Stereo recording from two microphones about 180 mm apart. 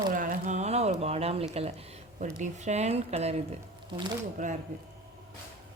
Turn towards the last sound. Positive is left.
turn(degrees=-45)  # may be behind; listen again after turning